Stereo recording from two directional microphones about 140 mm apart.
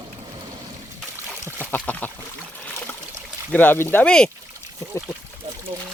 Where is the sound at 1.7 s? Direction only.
15° left (ahead or behind).